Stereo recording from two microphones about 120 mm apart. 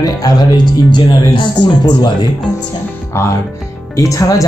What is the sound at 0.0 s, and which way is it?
Speech, 30° left (ahead or behind).